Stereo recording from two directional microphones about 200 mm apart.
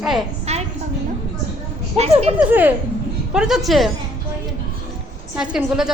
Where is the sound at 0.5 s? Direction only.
30° right (ahead or behind).